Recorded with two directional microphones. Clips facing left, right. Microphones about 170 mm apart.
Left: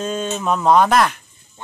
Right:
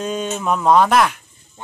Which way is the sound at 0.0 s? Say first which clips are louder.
Even; 15° right (ahead or behind).